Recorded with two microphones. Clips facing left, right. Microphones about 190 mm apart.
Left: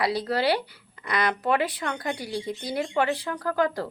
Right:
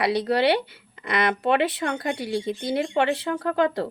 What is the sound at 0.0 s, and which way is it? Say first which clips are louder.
Speech: right 4 dB; 20° right (ahead or behind).